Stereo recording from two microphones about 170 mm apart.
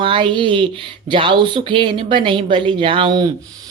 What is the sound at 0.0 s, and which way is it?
Speech, 30° right (ahead or behind).